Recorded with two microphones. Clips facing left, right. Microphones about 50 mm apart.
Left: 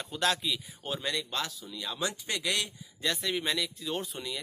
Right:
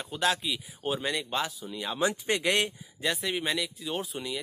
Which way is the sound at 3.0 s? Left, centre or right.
Centre.